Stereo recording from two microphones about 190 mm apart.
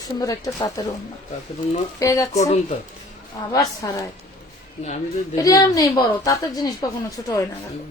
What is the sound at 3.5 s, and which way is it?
Speech, 20° left (ahead or behind).